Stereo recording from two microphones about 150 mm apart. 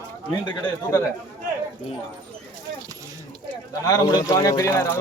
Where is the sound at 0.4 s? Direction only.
25° left (ahead or behind).